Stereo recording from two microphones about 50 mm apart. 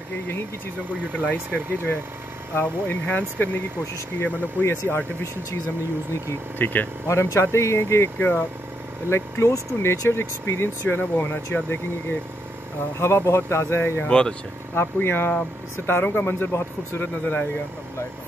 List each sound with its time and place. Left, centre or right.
1.1 s speech: left
2.6 s speech: left
6.6 s speech: left
7.1 s speech: left
8.2 s speech: left
9.1 s speech: left
10.9 s speech: left
13.0 s speech: left
14.0 s speech: centre
15.0 s speech: left